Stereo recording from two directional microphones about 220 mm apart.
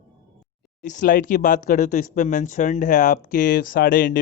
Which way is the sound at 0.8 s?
35° left (ahead or behind).